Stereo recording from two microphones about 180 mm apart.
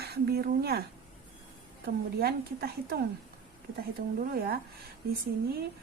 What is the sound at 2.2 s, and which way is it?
A woman's voice, 60° right (ahead or behind).